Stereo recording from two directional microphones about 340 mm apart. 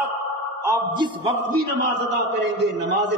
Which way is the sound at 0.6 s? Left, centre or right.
Centre.